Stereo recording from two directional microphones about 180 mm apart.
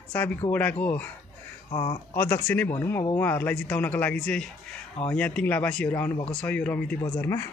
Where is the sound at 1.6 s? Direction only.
25° left (ahead or behind).